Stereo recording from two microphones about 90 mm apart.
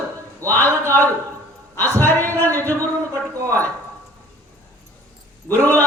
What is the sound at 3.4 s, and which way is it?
Speech, 35° right (ahead or behind).